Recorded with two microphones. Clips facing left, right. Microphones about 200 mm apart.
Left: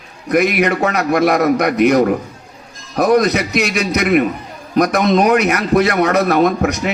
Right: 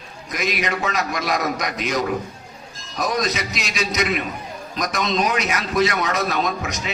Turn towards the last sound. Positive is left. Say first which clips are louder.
# left 11 dB
turn(degrees=60)  # may be behind; listen again after turning